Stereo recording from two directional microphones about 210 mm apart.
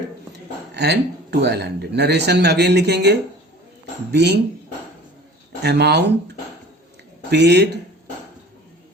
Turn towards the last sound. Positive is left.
turn(degrees=-55)  # may be behind; listen again after turning